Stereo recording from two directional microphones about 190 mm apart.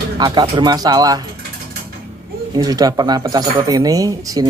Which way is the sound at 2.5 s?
20° right (ahead or behind).